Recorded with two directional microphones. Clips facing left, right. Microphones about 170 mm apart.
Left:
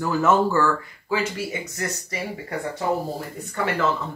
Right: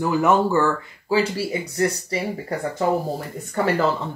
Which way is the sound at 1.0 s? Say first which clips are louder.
Right 5 dB; 35° right (ahead or behind).